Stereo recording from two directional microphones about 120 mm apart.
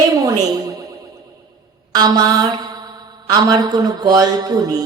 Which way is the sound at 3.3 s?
35° right (ahead or behind).